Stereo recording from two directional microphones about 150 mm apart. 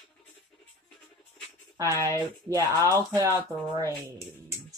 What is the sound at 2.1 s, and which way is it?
Speech, 20° right (ahead or behind).